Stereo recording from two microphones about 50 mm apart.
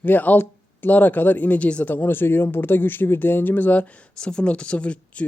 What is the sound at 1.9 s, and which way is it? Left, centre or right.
Speech, left.